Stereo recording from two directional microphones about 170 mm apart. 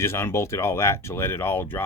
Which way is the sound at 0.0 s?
15° left (ahead or behind).